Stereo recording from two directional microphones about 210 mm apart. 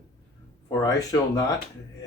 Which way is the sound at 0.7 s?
15° left (ahead or behind).